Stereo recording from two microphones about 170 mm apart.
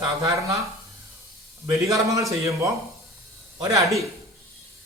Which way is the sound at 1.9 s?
20° right (ahead or behind).